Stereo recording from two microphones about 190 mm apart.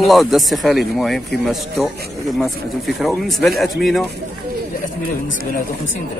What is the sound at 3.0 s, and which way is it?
Speech, centre (ahead or behind).